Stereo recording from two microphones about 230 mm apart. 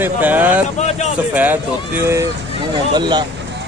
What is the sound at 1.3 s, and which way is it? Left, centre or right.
A man's voice, centre.